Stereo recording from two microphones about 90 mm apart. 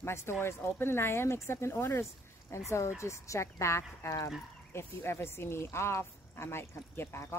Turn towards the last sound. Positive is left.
turn(degrees=25)  # may be behind; listen again after turning